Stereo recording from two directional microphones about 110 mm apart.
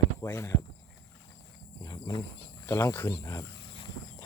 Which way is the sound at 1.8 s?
35° left (ahead or behind).